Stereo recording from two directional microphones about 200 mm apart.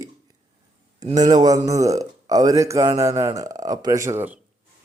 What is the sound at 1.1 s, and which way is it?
A man's voice, 20° right (ahead or behind).